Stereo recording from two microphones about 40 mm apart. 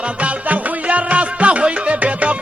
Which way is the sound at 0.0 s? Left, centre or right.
Right.